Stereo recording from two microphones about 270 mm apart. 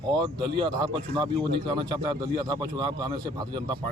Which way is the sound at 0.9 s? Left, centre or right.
Centre.